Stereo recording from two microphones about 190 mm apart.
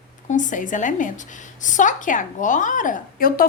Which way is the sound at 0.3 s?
40° left (ahead or behind).